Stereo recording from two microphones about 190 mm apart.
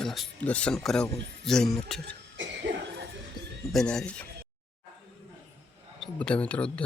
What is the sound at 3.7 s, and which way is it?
Speech, centre (ahead or behind).